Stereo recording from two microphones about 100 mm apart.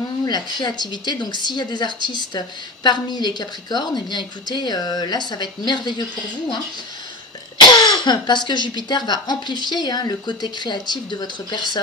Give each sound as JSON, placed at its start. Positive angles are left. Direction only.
{"t": 0.2, "sound": "speech", "side_deg": 45}
{"t": 7.6, "sound": "cough", "side_deg": 45}
{"t": 8.0, "sound": "speech", "side_deg": 50}